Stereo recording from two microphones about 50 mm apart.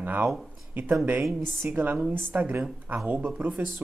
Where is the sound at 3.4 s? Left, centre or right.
Right.